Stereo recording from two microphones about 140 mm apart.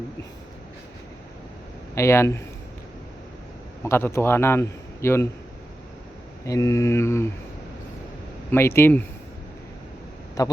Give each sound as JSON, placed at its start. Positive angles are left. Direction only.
{"t": 2.0, "sound": "a man's voice", "side_deg": 20}
{"t": 3.8, "sound": "a man's voice", "side_deg": 20}
{"t": 6.4, "sound": "a man's voice", "side_deg": 20}
{"t": 8.4, "sound": "speech", "side_deg": 15}
{"t": 10.4, "sound": "a man's voice", "side_deg": 25}